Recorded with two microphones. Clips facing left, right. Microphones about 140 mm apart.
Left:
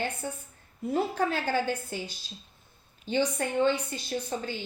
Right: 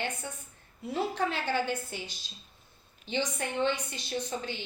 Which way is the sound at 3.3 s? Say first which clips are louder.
Left 4 dB; 45° left (ahead or behind).